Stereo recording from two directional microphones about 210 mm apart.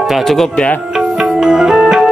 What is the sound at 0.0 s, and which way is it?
Music, centre (ahead or behind).